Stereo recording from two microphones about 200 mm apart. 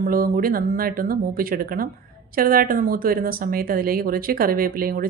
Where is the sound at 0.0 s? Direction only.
45° right (ahead or behind).